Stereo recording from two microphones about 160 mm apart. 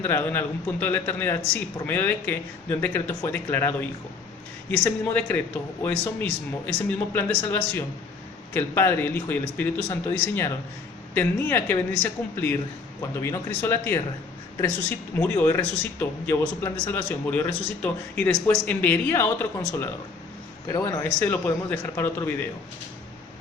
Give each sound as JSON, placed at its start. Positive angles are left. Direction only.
{"t": 0.0, "sound": "a man's voice", "side_deg": 15}
{"t": 7.1, "sound": "a man's voice", "side_deg": 15}